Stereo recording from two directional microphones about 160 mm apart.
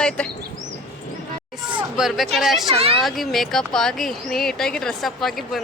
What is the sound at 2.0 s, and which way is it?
Speech, centre (ahead or behind).